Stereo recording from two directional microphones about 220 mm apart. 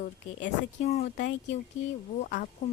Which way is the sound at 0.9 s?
30° left (ahead or behind).